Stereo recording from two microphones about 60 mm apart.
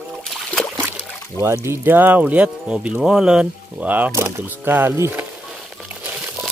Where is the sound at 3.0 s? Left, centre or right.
Centre.